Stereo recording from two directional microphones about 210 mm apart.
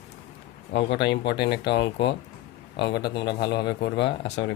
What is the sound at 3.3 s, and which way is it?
Speech, 50° left (ahead or behind).